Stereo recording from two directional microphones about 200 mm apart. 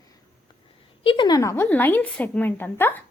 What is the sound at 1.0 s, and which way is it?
A woman's voice, 25° left (ahead or behind).